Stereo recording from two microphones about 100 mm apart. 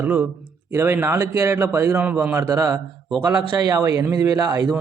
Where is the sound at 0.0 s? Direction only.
15° right (ahead or behind).